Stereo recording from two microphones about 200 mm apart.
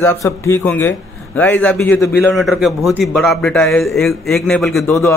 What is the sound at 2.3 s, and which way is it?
A man's voice, centre (ahead or behind).